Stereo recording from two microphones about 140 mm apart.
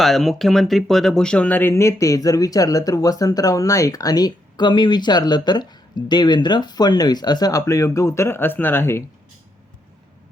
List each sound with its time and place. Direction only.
0.0 s speech: centre (ahead or behind)